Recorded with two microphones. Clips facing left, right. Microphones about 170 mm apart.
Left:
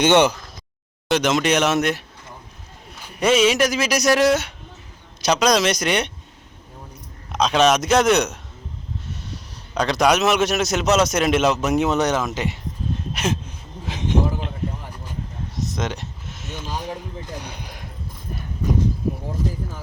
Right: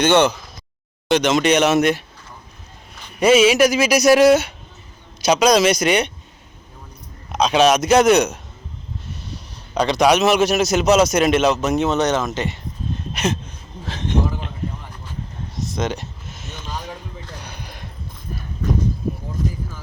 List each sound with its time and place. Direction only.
0.0 s a man's voice: 15° left (ahead or behind)
1.0 s speech: centre (ahead or behind)
3.2 s speech: 5° right (ahead or behind)
7.3 s a man's voice: centre (ahead or behind)
15.8 s a sound: centre (ahead or behind)
17.2 s a sound: 15° left (ahead or behind)